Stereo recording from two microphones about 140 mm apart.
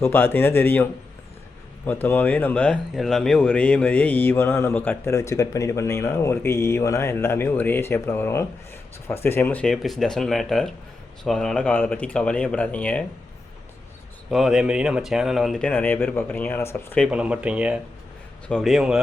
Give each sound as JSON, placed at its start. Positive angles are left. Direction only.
{"t": 0.0, "sound": "speech", "side_deg": 15}
{"t": 1.9, "sound": "speech", "side_deg": 15}
{"t": 14.3, "sound": "speech", "side_deg": -5}
{"t": 15.7, "sound": "speech", "side_deg": 15}
{"t": 17.1, "sound": "speech", "side_deg": -10}
{"t": 18.4, "sound": "speech", "side_deg": 5}